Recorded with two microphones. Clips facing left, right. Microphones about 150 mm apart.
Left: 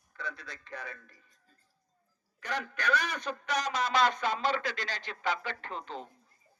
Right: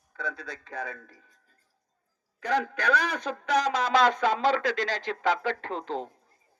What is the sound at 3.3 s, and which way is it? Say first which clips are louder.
Speech: right 9 dB; 90° right.